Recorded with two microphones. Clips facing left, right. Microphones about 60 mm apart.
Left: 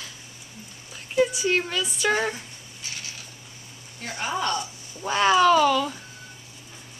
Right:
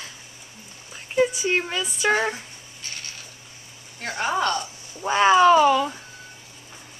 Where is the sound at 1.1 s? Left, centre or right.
Centre.